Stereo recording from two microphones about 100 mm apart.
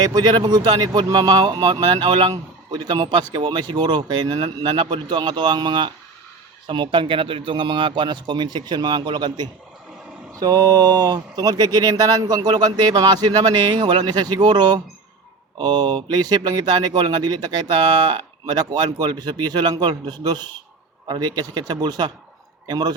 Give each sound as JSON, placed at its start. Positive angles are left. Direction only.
{"t": 0.0, "sound": "speech", "side_deg": -45}